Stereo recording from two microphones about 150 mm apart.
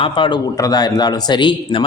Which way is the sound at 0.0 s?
30° left (ahead or behind).